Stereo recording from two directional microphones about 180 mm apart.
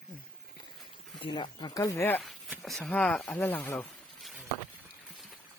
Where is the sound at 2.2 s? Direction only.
Centre (ahead or behind).